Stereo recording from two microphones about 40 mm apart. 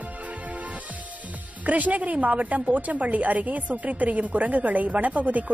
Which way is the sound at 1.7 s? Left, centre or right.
Right.